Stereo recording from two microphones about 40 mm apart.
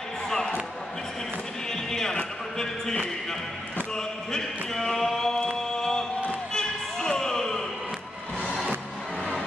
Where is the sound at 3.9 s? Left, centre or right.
Centre.